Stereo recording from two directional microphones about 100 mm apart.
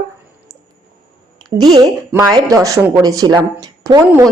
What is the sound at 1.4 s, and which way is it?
A woman's voice, 40° right (ahead or behind).